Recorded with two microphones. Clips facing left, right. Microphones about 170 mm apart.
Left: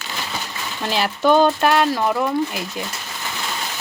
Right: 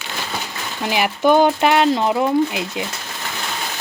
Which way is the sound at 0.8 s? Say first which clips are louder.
Right 2 dB; 15° right (ahead or behind).